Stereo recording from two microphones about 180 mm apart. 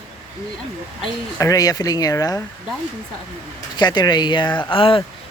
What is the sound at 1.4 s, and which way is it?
Speech, 20° left (ahead or behind).